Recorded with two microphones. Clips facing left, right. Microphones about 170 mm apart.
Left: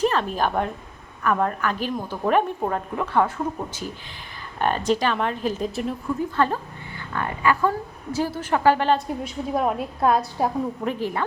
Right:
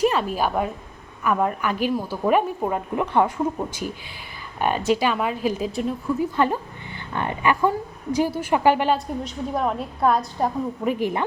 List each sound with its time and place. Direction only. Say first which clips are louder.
0.0 s a woman's voice: right 1 dB; 10° right (ahead or behind)
6.3 s a woman's voice: right 1 dB; 15° right (ahead or behind)
9.2 s a woman's voice: left 1 dB; 10° left (ahead or behind)
10.8 s a woman's voice: right 3 dB; 15° right (ahead or behind)